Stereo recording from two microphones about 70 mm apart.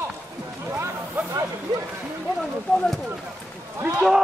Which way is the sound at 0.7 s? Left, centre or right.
Right.